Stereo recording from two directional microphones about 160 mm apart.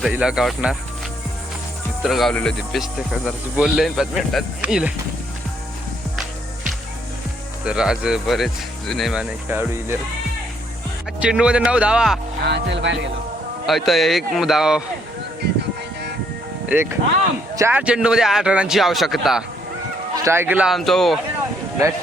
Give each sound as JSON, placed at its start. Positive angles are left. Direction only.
{"t": 0.0, "sound": "speech", "side_deg": -5}
{"t": 2.0, "sound": "speech", "side_deg": 0}
{"t": 7.6, "sound": "speech", "side_deg": -5}
{"t": 9.5, "sound": "speech", "side_deg": -10}
{"t": 11.2, "sound": "speech", "side_deg": -5}
{"t": 12.4, "sound": "speech", "side_deg": -90}
{"t": 13.7, "sound": "speech", "side_deg": 0}
{"t": 16.6, "sound": "speech", "side_deg": -15}
{"t": 17.5, "sound": "a sound", "side_deg": -20}
{"t": 17.7, "sound": "speech", "side_deg": -5}
{"t": 20.2, "sound": "speech", "side_deg": -15}